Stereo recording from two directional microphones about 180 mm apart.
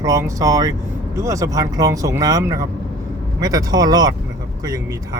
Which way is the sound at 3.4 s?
20° right (ahead or behind).